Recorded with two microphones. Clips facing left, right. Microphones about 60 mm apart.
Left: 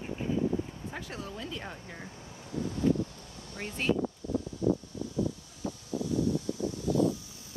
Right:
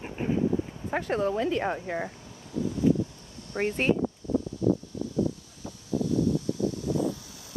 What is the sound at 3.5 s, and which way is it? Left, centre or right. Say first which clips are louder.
Speech: right 7 dB; right.